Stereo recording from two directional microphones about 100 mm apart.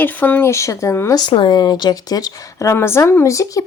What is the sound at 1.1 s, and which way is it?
Speech, 50° left (ahead or behind).